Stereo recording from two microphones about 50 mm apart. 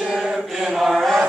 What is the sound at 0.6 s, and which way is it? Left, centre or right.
Chant, centre.